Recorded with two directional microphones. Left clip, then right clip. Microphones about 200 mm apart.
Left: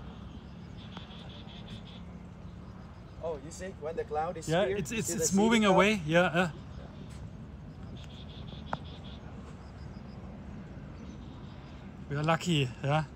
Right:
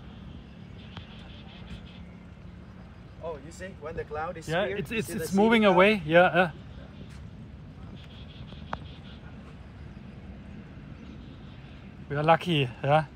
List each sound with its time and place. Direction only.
3.3 s speech: 55° left (ahead or behind)
4.5 s speech: 15° left (ahead or behind)
12.1 s speech: 5° left (ahead or behind)